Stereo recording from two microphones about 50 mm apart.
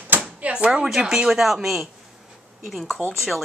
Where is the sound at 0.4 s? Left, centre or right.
Right.